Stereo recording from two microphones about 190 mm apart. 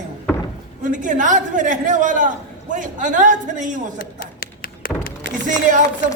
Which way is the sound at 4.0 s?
50° left (ahead or behind).